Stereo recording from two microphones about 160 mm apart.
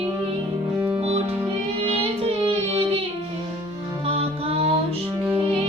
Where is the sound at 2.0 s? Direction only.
35° right (ahead or behind).